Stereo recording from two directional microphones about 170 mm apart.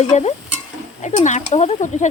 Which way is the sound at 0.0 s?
40° left (ahead or behind).